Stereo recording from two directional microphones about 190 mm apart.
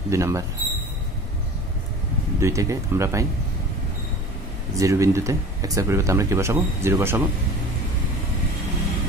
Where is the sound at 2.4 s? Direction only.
15° right (ahead or behind).